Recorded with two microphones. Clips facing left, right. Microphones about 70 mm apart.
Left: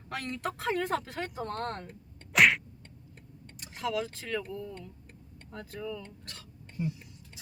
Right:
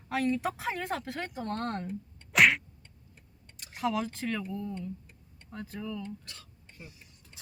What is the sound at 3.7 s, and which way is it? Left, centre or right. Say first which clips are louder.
Speech: right 2 dB; centre.